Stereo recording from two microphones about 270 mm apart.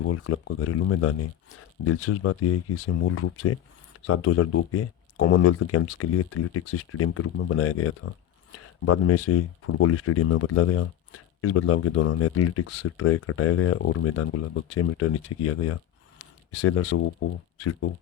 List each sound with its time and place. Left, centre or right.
0.1 s speech: left